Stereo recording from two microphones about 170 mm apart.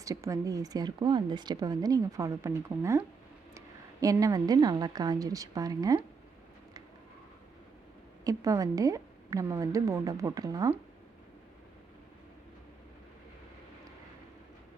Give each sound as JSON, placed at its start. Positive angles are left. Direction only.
{"t": 0.0, "sound": "a woman's voice", "side_deg": -20}
{"t": 4.0, "sound": "a woman's voice", "side_deg": -20}
{"t": 8.2, "sound": "a woman's voice", "side_deg": -20}